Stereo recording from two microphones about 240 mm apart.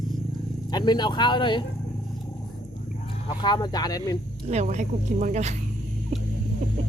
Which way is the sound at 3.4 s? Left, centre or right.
Centre.